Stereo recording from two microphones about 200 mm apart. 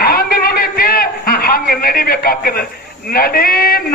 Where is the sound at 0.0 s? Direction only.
50° left (ahead or behind).